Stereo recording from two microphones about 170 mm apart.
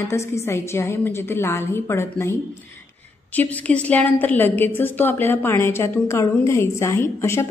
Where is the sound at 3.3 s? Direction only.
10° left (ahead or behind).